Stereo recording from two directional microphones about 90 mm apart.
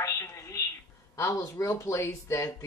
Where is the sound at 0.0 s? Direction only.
35° left (ahead or behind).